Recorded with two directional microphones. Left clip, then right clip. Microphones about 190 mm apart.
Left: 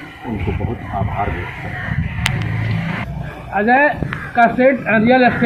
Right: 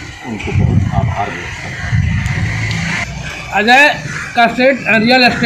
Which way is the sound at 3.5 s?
15° right (ahead or behind).